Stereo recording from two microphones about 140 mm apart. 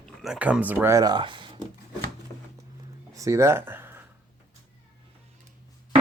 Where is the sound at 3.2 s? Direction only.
20° right (ahead or behind).